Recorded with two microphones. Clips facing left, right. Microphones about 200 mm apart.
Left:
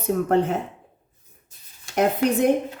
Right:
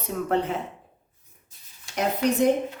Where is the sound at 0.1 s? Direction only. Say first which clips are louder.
Left 5 dB; 45° left (ahead or behind).